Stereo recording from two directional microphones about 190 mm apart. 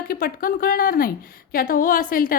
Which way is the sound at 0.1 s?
50° left (ahead or behind).